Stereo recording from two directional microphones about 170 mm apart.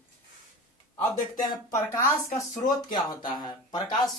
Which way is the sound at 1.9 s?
20° left (ahead or behind).